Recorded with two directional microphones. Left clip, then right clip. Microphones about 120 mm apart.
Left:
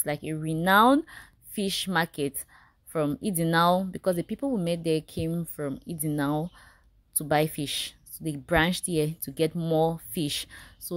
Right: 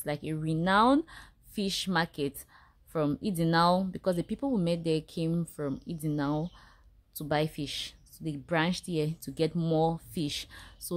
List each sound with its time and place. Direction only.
0.0 s speech: 20° left (ahead or behind)
0.7 s speech: 30° left (ahead or behind)
1.0 s a woman's voice: 15° left (ahead or behind)
5.9 s a woman's voice: 25° left (ahead or behind)
9.2 s a woman's voice: 15° left (ahead or behind)